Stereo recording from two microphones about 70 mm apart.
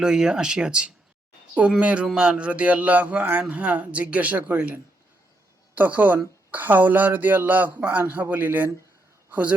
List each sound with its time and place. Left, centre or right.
0.0 s a woman's voice: centre; by 8.7 s right